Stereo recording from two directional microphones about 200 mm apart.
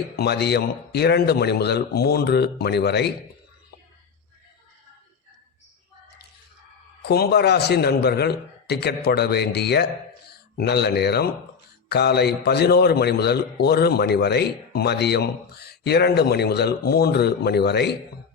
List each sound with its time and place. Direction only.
0.2 s a man's voice: 55° left (ahead or behind)
7.0 s a man's voice: 55° left (ahead or behind)